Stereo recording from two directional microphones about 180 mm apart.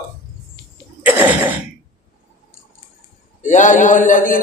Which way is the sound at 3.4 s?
45° left (ahead or behind).